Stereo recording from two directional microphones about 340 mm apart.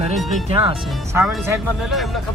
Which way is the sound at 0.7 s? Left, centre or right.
Centre.